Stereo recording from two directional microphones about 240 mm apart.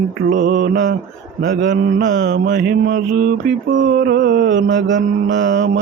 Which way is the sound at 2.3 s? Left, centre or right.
Right.